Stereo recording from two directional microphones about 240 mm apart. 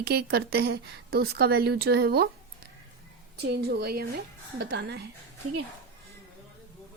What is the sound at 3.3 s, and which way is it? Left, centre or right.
A woman's voice, right.